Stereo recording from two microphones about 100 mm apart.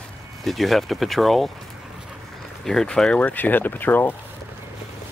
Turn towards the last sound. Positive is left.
turn(degrees=20)  # may be behind; listen again after turning